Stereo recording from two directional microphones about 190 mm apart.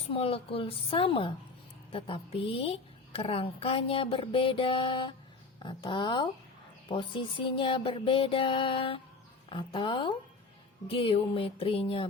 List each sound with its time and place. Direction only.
0.1 s a woman's voice: 30° left (ahead or behind)